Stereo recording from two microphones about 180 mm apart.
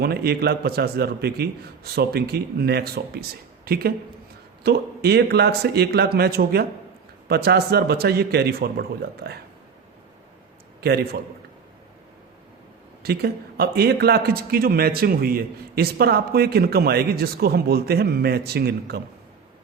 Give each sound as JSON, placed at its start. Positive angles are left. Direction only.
{"t": 0.0, "sound": "a man's voice", "side_deg": -60}
{"t": 10.8, "sound": "a man's voice", "side_deg": -60}
{"t": 13.0, "sound": "a man's voice", "side_deg": -60}